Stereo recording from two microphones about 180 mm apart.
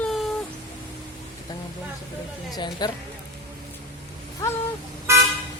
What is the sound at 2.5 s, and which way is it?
Speech, 25° left (ahead or behind).